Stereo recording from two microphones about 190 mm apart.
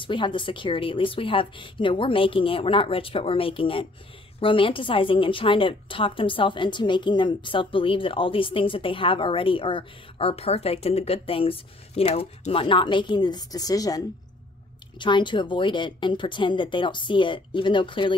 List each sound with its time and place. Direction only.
0.0 s a woman's voice: 25° left (ahead or behind)